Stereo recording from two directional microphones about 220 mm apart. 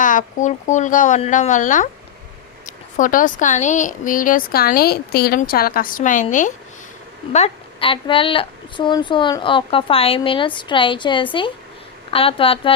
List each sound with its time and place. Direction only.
0.0 s speech: 35° left (ahead or behind)